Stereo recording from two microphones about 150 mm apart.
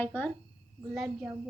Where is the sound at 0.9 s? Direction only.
5° right (ahead or behind).